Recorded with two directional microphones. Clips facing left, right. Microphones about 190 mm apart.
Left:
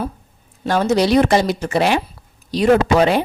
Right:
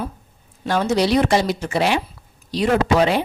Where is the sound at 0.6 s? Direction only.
45° left (ahead or behind).